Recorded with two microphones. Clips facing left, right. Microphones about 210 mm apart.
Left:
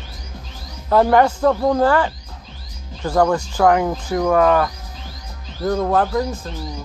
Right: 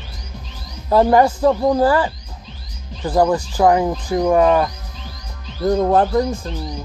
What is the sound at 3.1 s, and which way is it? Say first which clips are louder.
Speech: right 1 dB; 15° right (ahead or behind).